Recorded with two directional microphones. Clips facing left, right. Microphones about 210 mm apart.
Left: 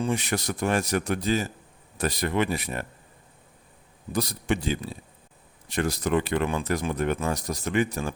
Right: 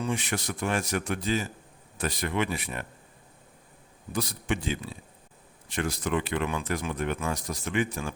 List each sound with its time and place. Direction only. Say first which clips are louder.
0.0 s speech: left 3 dB; 40° left (ahead or behind)
4.1 s speech: left 3 dB; 35° left (ahead or behind)